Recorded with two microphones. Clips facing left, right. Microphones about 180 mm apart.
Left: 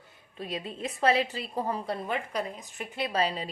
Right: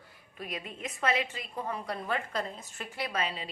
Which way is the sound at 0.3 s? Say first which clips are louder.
Left 4 dB; 30° left (ahead or behind).